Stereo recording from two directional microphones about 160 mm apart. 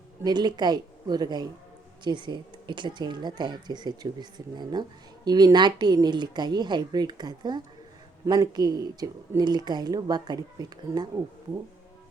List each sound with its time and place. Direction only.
0.3 s speech: 25° right (ahead or behind)